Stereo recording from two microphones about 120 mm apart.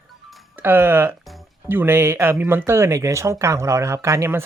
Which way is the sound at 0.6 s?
20° right (ahead or behind).